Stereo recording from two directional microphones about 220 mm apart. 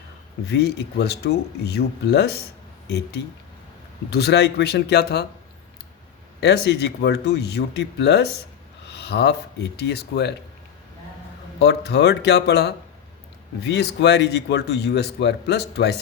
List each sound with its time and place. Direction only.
0.5 s speech: 50° left (ahead or behind)
4.1 s speech: 50° left (ahead or behind)
6.4 s speech: 50° left (ahead or behind)
11.6 s speech: 50° left (ahead or behind)